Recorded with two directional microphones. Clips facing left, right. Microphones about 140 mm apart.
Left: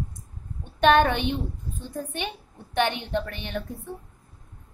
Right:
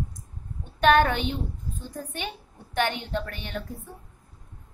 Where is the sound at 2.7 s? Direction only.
20° left (ahead or behind).